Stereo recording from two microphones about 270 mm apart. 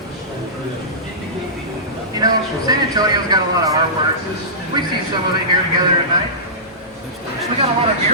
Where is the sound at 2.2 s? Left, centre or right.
Centre.